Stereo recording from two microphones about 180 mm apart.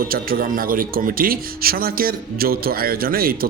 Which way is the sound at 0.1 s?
55° right (ahead or behind).